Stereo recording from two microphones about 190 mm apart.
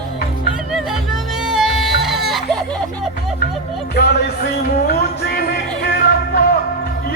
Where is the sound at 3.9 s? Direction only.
55° left (ahead or behind).